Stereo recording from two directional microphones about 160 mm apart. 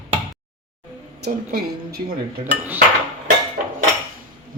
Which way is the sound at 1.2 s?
85° right.